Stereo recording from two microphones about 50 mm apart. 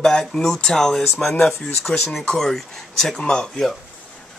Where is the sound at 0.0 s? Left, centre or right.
Centre.